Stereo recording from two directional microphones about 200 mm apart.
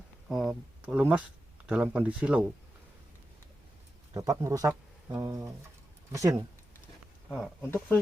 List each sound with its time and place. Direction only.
0.3 s speech: centre (ahead or behind)
4.1 s speech: 20° right (ahead or behind)
7.6 s speech: 10° left (ahead or behind)